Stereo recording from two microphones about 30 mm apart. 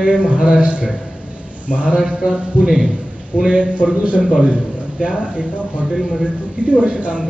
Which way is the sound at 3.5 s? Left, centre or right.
Right.